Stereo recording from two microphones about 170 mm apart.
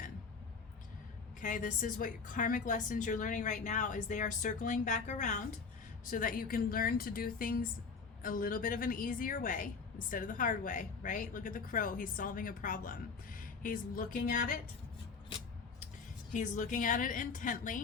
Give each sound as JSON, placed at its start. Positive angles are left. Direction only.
{"t": 1.4, "sound": "a woman's voice", "side_deg": 50}
{"t": 16.3, "sound": "a woman's voice", "side_deg": 50}